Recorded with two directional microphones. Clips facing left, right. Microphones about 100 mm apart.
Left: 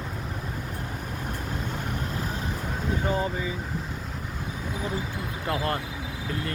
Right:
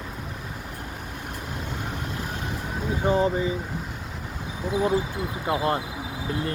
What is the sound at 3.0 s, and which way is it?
Speech, 25° right (ahead or behind).